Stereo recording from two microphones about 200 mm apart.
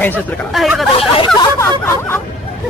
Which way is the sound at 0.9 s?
25° left (ahead or behind).